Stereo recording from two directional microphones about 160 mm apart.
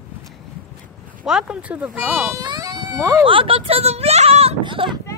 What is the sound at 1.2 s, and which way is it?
Speech, 5° right (ahead or behind).